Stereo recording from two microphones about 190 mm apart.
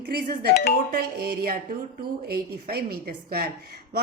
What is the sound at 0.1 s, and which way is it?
A woman's voice, 55° right (ahead or behind).